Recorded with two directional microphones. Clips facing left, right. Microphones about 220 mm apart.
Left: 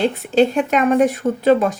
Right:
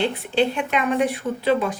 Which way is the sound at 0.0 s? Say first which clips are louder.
Left 5 dB; 45° left (ahead or behind).